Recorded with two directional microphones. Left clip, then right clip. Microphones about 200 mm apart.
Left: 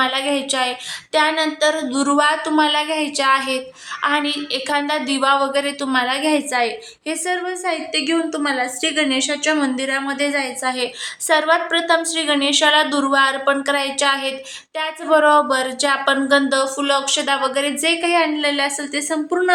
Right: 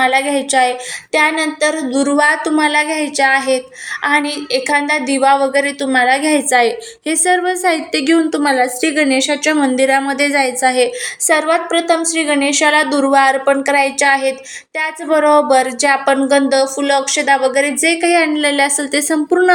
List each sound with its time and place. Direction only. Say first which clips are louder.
0.0 s a woman's voice: right 5 dB; 10° right (ahead or behind)